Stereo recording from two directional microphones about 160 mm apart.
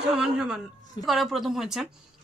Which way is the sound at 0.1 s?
5° right (ahead or behind).